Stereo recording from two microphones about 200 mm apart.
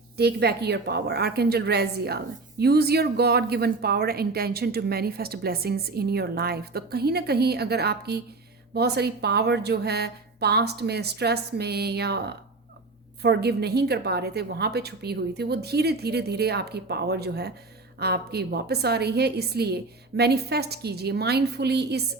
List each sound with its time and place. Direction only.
0.2 s a woman's voice: 55° right (ahead or behind)